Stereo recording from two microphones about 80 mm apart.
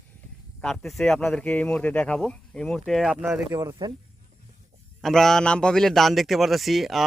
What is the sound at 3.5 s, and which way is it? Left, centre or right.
Speech, right.